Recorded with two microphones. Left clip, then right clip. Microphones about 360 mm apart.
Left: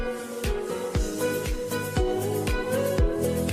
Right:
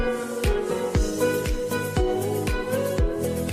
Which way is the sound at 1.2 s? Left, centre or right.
Right.